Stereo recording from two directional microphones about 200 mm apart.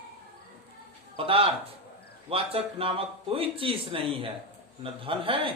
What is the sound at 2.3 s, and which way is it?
A man's voice, 30° right (ahead or behind).